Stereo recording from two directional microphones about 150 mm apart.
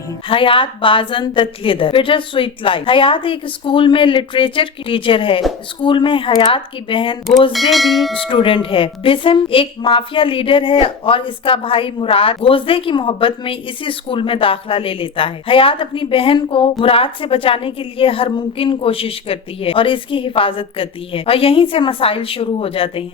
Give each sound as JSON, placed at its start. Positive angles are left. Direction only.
{"t": 0.3, "sound": "a woman's voice", "side_deg": 35}
{"t": 7.5, "sound": "speech", "side_deg": 0}
{"t": 8.1, "sound": "a woman's voice", "side_deg": 35}